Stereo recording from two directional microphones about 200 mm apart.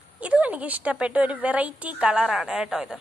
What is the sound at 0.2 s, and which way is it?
A woman's voice, 5° right (ahead or behind).